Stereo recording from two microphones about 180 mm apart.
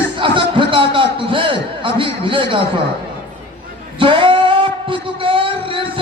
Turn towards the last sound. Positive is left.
turn(degrees=-30)  # may be behind; listen again after turning